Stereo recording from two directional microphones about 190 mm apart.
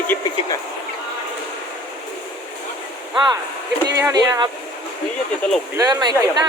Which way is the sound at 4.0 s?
20° right (ahead or behind).